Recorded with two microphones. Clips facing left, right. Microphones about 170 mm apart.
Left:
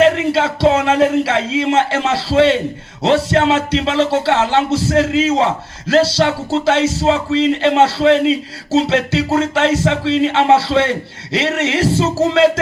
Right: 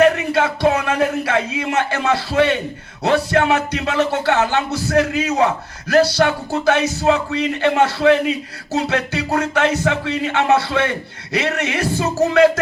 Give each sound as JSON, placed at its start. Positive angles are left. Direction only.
{"t": 0.3, "sound": "music", "side_deg": 25}